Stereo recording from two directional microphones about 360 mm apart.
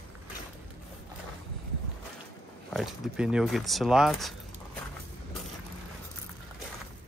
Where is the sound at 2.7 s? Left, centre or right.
Centre.